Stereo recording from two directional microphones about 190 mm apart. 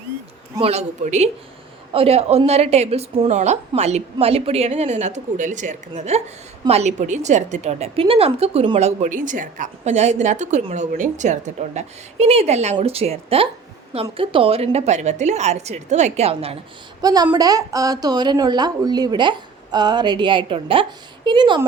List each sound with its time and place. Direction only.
0.6 s a woman's voice: 35° right (ahead or behind)
17.0 s a woman's voice: 20° right (ahead or behind)